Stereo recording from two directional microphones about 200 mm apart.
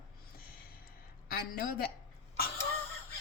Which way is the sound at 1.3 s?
45° left (ahead or behind).